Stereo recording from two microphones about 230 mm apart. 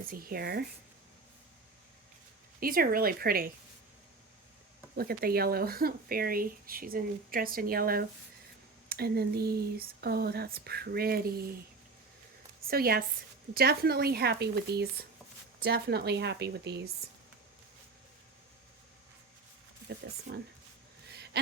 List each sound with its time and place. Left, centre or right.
0.1 s speech: right
2.6 s speech: right
4.9 s speech: right
12.6 s a woman's voice: right
20.3 s speech: right